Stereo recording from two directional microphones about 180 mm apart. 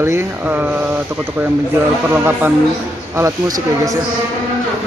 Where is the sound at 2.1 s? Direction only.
10° right (ahead or behind).